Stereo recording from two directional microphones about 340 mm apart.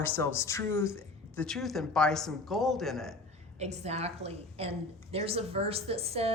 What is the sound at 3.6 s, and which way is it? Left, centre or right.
A woman's voice, centre.